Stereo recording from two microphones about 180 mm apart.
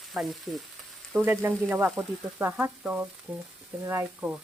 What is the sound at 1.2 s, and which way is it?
Frying, 15° right (ahead or behind).